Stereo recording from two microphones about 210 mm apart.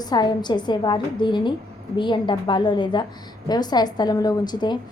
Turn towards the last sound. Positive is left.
turn(degrees=20)  # may be behind; listen again after turning